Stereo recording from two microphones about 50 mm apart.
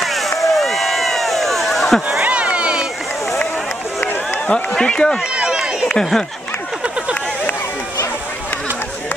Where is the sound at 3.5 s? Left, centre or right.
Left.